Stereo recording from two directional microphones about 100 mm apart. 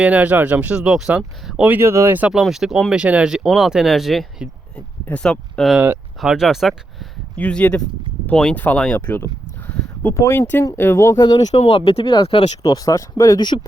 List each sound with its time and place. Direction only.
0.0 s speech: 15° right (ahead or behind)
1.7 s speech: 25° right (ahead or behind)
2.1 s speech: 15° right (ahead or behind); by 5.7 s 5° left (ahead or behind)
6.1 s speech: 5° right (ahead or behind)
7.3 s speech: 15° left (ahead or behind)
9.2 s a sound: 20° left (ahead or behind)
10.2 s speech: 25° left (ahead or behind)
11.2 s speech: 40° left (ahead or behind)
11.5 s speech: 85° left; by 12.7 s 65° left (ahead or behind)
12.7 s speech: 35° left (ahead or behind)